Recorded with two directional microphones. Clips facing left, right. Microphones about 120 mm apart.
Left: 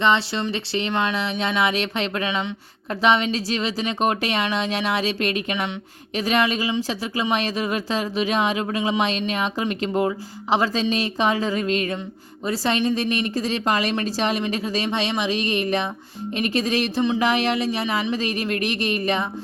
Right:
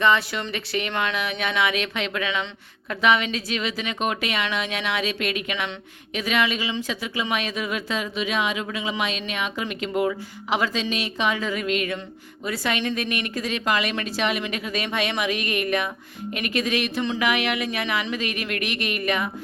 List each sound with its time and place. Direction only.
0.0 s speech: 25° left (ahead or behind)